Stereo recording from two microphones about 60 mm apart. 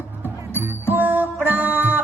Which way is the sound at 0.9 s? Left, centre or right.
Right.